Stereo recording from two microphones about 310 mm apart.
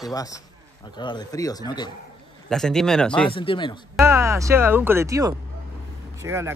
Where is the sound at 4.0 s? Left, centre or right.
Centre.